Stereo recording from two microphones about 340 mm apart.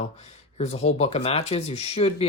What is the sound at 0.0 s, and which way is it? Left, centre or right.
Speech, centre.